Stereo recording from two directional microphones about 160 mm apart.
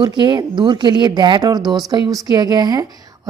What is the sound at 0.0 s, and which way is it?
Speech, 30° right (ahead or behind).